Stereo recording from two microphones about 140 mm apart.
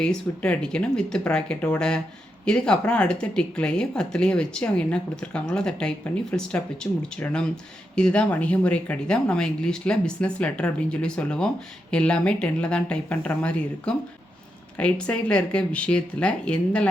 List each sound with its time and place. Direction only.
0.0 s speech: 5° left (ahead or behind)